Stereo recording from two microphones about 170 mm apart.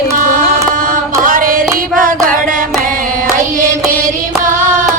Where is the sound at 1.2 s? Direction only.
55° right (ahead or behind).